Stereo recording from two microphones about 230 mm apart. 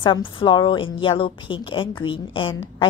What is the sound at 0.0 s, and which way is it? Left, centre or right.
A woman's voice, left.